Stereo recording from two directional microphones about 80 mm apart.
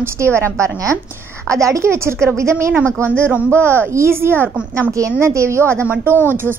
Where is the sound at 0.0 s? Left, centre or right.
Right.